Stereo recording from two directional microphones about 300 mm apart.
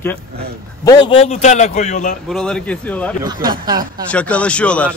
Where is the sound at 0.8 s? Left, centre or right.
Centre.